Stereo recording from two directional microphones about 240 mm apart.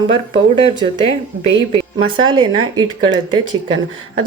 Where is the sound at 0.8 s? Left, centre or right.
Centre.